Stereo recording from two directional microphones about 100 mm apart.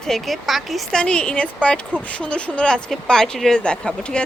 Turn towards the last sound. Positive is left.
turn(degrees=10)  # may be behind; listen again after turning